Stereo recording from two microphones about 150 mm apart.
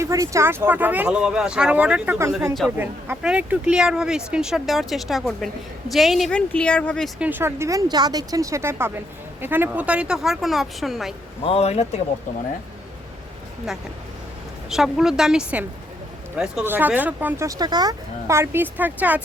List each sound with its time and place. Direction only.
0.0 s speech: 20° right (ahead or behind); by 7.1 s 5° left (ahead or behind)
7.2 s speech: 15° right (ahead or behind)
11.4 s a man's voice: 45° left (ahead or behind)
14.7 s speech: 5° right (ahead or behind)